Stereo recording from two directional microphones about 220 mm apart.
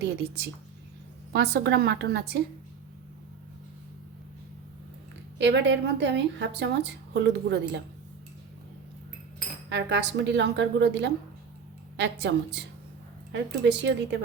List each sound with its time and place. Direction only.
0.0 s a woman's voice: 50° right (ahead or behind)
5.4 s a woman's voice: 55° right (ahead or behind)
9.6 s a woman's voice: 55° right (ahead or behind)